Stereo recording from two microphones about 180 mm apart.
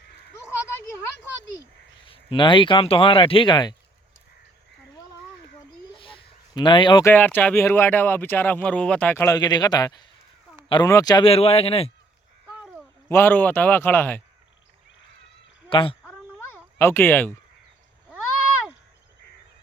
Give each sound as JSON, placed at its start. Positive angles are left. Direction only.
{"t": 2.0, "sound": "speech", "side_deg": 30}
{"t": 5.9, "sound": "a sound", "side_deg": 30}
{"t": 7.0, "sound": "speech", "side_deg": 10}
{"t": 13.1, "sound": "speech", "side_deg": 10}
{"t": 15.7, "sound": "speech", "side_deg": 30}
{"t": 16.7, "sound": "speech", "side_deg": 15}